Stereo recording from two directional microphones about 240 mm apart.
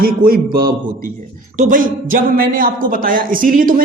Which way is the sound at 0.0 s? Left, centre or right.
Right.